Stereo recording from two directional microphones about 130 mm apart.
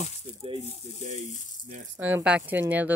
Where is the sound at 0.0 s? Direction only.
50° right (ahead or behind).